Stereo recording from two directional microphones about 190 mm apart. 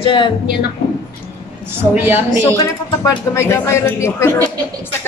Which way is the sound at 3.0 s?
15° left (ahead or behind).